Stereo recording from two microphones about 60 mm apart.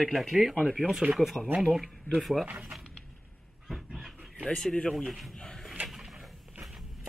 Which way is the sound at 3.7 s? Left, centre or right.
Centre.